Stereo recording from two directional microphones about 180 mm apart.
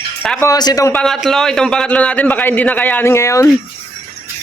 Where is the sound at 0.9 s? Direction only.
Centre (ahead or behind).